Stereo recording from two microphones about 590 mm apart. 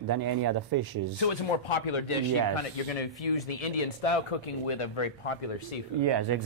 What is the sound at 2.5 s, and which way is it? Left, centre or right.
Speech, left.